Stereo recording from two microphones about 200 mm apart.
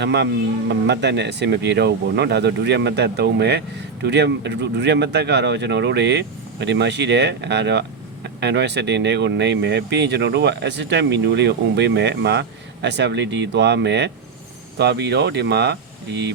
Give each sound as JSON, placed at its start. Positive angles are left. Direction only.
{"t": 0.0, "sound": "speech", "side_deg": -60}